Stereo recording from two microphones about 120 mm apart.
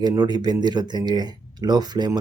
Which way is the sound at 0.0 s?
35° right (ahead or behind).